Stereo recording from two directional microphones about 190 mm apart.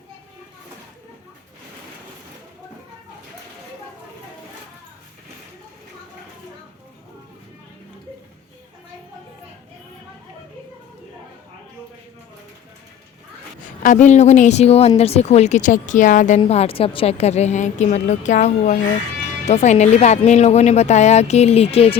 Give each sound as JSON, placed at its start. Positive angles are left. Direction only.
{"t": 13.6, "sound": "a woman's voice", "side_deg": 40}